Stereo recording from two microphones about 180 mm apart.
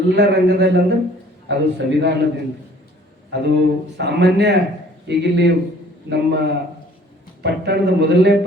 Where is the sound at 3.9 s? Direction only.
70° right (ahead or behind).